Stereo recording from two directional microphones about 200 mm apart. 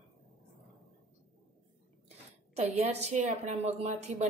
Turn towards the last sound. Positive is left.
turn(degrees=-35)  # may be behind; listen again after turning